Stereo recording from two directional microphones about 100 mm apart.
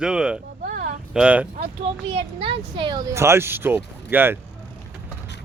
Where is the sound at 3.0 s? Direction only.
30° right (ahead or behind).